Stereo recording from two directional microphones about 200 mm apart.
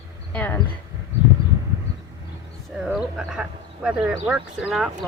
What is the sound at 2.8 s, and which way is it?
A woman's voice, 5° right (ahead or behind).